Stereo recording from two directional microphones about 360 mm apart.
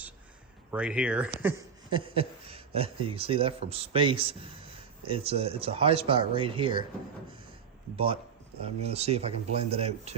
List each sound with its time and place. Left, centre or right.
0.7 s speech: centre
7.9 s speech: centre